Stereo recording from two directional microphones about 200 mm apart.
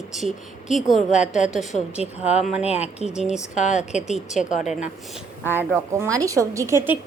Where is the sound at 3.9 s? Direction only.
5° right (ahead or behind).